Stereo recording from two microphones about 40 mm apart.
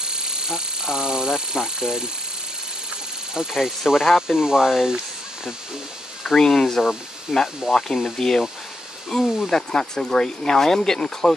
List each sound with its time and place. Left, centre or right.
0.0 s speech: centre
3.3 s speech: centre
6.3 s speech: centre
6.8 s speech: centre
7.3 s speech: centre